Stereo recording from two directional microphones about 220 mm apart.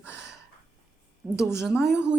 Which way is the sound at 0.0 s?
5° right (ahead or behind).